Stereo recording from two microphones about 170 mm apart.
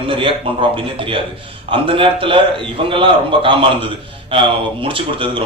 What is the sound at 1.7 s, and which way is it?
A man's voice, 30° right (ahead or behind).